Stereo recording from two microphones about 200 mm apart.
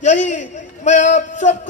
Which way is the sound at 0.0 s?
35° left (ahead or behind).